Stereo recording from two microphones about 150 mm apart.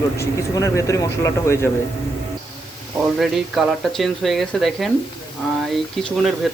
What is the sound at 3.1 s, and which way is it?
Speech, centre (ahead or behind).